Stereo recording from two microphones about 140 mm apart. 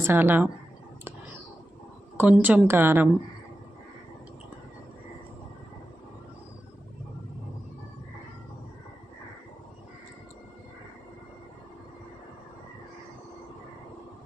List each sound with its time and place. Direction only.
0.0 s speech: 15° right (ahead or behind)
2.1 s a woman's voice: 10° right (ahead or behind)